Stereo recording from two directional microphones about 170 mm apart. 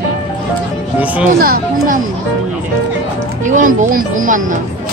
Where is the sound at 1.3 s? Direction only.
55° right (ahead or behind).